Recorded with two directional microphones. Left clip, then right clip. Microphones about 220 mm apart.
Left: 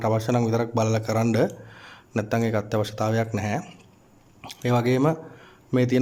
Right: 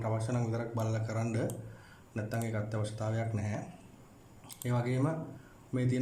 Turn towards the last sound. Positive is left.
turn(degrees=40)  # may be behind; listen again after turning